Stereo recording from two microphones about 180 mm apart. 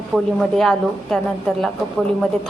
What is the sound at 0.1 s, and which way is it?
A woman's voice, centre (ahead or behind).